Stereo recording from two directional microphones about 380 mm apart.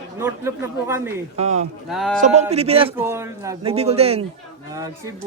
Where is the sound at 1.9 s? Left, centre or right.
Centre.